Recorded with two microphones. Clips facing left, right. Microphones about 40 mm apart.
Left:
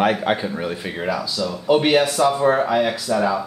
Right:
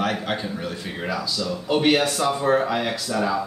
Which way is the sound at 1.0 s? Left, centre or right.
Centre.